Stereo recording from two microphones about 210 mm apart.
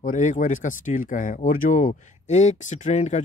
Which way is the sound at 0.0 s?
35° left (ahead or behind).